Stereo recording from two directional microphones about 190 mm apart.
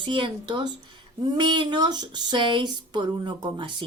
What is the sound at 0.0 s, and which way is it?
Speech, 25° right (ahead or behind).